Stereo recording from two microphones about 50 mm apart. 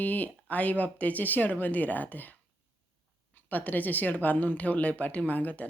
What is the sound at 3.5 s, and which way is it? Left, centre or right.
Speech, left.